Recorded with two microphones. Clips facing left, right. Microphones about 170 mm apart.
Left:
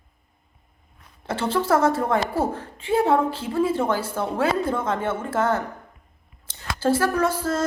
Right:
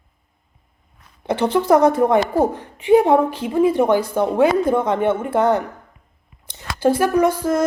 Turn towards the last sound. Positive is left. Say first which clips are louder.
# right 6 dB
turn(degrees=-15)  # may be behind; listen again after turning